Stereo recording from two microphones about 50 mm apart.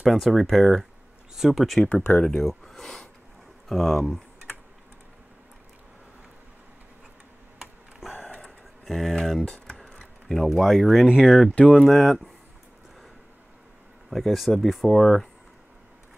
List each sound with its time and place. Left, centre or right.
0.0 s speech: centre
8.0 s a sound: centre
8.8 s speech: centre
9.4 s speech: centre
9.8 s tick-tock: centre
10.2 s speech: centre
14.1 s speech: centre